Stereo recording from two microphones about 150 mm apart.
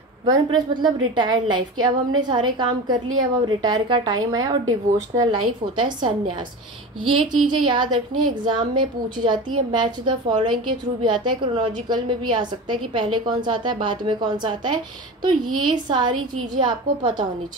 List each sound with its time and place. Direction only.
0.2 s a woman's voice: 30° right (ahead or behind)
7.1 s a woman's voice: 30° right (ahead or behind)